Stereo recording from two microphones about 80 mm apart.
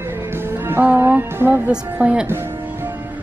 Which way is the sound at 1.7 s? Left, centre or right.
Centre.